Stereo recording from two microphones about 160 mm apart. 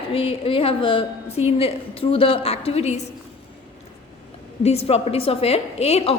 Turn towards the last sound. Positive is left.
turn(degrees=40)  # may be behind; listen again after turning